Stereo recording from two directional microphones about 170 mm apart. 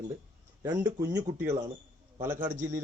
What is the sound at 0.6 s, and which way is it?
A man's voice, 20° right (ahead or behind).